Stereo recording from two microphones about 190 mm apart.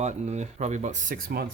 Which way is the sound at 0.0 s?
35° right (ahead or behind).